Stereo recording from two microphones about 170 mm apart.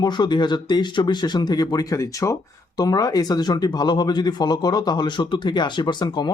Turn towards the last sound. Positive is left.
turn(degrees=25)  # may be behind; listen again after turning